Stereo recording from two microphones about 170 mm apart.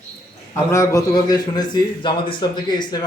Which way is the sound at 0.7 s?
20° left (ahead or behind).